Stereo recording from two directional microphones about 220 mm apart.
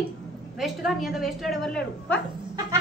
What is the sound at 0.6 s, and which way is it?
A man's voice, centre (ahead or behind).